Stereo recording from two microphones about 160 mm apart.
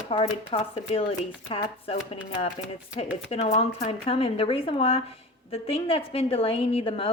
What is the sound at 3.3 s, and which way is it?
Speech, 40° left (ahead or behind).